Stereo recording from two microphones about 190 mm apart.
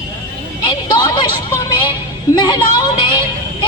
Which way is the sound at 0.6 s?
20° left (ahead or behind).